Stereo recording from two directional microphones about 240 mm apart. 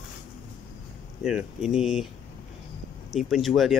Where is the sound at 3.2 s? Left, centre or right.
Centre.